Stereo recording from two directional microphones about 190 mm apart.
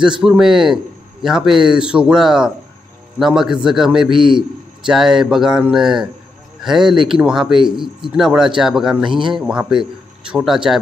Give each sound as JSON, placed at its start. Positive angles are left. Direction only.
{"t": 0.2, "sound": "a man's voice", "side_deg": -5}
{"t": 4.2, "sound": "speech", "side_deg": -25}
{"t": 4.8, "sound": "a man's voice", "side_deg": 0}
{"t": 9.1, "sound": "speech", "side_deg": -25}
{"t": 9.4, "sound": "a man's voice", "side_deg": -5}